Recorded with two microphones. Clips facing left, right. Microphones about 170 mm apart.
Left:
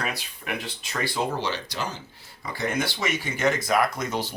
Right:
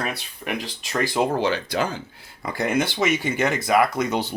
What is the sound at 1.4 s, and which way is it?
Speech, 55° right (ahead or behind).